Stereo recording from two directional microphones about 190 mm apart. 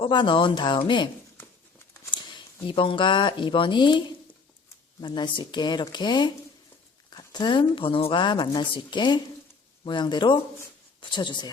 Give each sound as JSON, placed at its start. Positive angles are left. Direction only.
{"t": 0.0, "sound": "speech", "side_deg": 25}